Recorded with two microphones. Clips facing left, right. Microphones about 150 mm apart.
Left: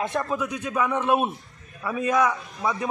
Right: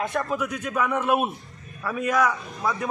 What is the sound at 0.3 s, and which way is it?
A man's voice, 20° left (ahead or behind).